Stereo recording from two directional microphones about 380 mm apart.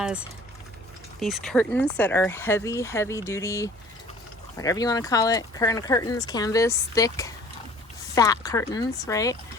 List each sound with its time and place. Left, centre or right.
0.0 s speech: centre